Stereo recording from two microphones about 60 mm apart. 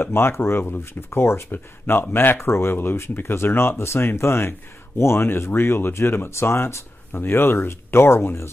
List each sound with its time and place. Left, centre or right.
0.0 s speech: left